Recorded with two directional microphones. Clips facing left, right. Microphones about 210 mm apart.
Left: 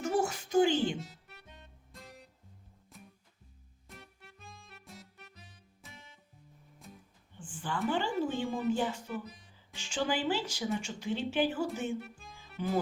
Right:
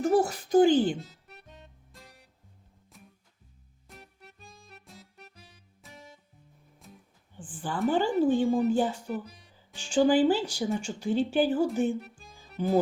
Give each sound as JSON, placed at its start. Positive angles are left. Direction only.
{"t": 0.0, "sound": "music", "side_deg": -35}
{"t": 1.9, "sound": "music", "side_deg": 0}
{"t": 4.4, "sound": "music", "side_deg": 0}
{"t": 7.3, "sound": "speech", "side_deg": -35}